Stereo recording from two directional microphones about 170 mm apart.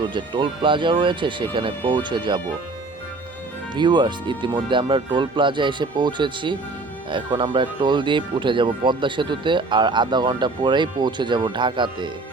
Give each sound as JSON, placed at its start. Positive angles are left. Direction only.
{"t": 0.0, "sound": "speech", "side_deg": -25}
{"t": 3.8, "sound": "speech", "side_deg": -25}